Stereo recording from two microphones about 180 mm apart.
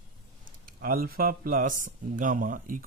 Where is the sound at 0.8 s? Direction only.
55° right (ahead or behind).